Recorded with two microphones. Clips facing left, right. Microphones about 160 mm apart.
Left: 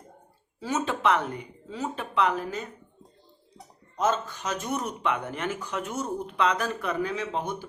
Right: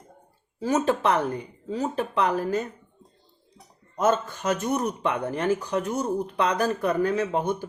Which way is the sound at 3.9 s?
50° right (ahead or behind).